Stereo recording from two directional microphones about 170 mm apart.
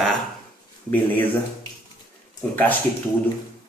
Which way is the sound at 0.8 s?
15° left (ahead or behind).